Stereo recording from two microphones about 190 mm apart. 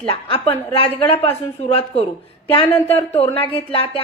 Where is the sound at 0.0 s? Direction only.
30° left (ahead or behind).